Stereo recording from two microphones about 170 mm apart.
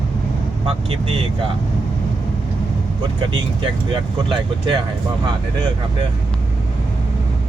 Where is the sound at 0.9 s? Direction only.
35° right (ahead or behind).